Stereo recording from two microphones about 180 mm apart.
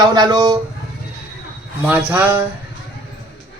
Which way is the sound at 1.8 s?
10° right (ahead or behind).